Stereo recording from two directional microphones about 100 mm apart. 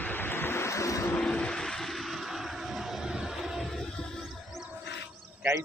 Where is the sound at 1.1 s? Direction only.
10° left (ahead or behind).